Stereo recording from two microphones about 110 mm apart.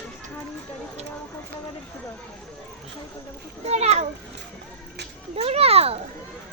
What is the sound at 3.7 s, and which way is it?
Speech, 85° right.